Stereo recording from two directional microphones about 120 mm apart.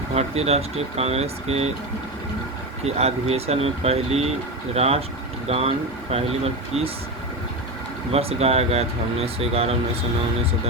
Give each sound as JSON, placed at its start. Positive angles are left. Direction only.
{"t": 0.1, "sound": "speech", "side_deg": -60}
{"t": 2.8, "sound": "speech", "side_deg": -60}
{"t": 8.1, "sound": "speech", "side_deg": -55}